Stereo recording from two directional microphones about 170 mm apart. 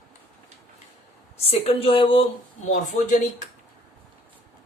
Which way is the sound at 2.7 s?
45° left (ahead or behind).